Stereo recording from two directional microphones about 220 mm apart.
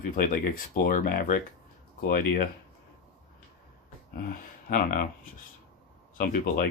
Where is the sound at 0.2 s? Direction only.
40° left (ahead or behind).